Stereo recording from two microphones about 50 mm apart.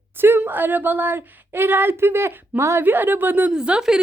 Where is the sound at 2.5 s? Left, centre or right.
Right.